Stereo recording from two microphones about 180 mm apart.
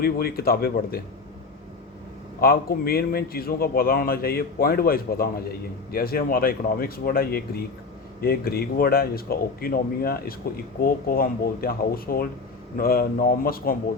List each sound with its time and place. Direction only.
0.0 s a man's voice: 55° left (ahead or behind)
2.4 s a man's voice: 55° left (ahead or behind)